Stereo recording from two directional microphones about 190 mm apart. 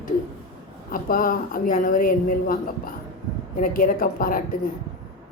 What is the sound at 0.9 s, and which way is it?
A woman's voice, 45° left (ahead or behind).